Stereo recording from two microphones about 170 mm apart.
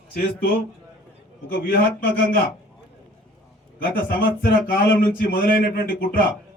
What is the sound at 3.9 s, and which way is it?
A man's voice, 60° left (ahead or behind).